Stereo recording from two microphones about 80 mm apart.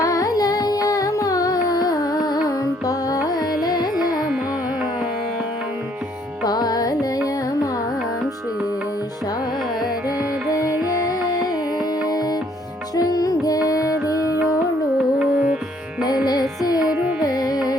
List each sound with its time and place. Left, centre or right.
0.0 s music: left
3.6 s carnatic music: left
6.4 s music: left
10.2 s music: centre
12.1 s music: left
14.9 s music: centre
16.2 s music: left
16.8 s carnatic music: centre
17.2 s music: left